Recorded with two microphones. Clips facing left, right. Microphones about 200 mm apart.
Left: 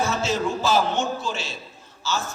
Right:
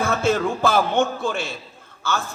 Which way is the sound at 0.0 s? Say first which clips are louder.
Right 3 dB; 55° right (ahead or behind).